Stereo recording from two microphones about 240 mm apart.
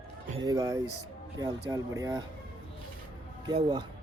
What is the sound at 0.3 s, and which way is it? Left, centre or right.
Speech, centre.